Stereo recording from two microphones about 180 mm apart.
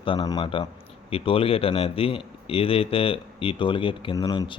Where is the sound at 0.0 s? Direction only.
25° left (ahead or behind).